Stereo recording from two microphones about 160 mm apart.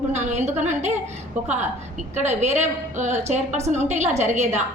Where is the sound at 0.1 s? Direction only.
45° right (ahead or behind).